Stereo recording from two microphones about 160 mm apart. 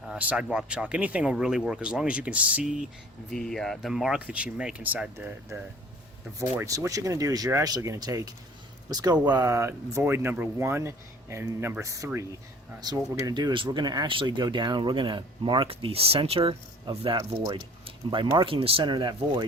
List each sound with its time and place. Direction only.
0.0 s speech: 5° right (ahead or behind); by 19.5 s 25° right (ahead or behind)